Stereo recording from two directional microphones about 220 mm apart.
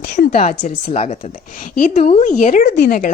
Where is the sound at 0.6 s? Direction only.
35° left (ahead or behind).